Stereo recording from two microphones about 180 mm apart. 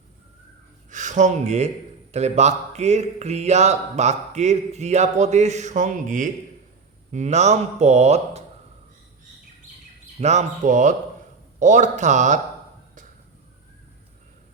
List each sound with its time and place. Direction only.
0.9 s speech: 45° right (ahead or behind)
10.2 s speech: 40° right (ahead or behind)